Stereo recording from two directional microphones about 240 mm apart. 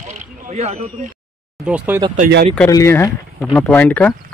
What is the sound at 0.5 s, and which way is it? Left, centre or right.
Speech, right.